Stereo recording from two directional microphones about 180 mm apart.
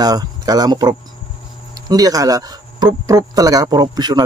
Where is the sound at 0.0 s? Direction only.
20° right (ahead or behind).